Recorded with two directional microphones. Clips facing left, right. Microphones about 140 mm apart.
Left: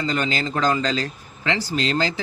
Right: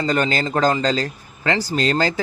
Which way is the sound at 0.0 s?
45° right (ahead or behind).